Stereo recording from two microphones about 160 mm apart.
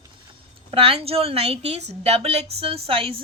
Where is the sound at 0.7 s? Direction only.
35° right (ahead or behind).